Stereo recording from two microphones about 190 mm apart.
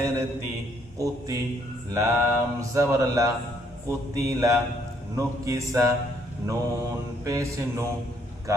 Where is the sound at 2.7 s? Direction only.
15° right (ahead or behind).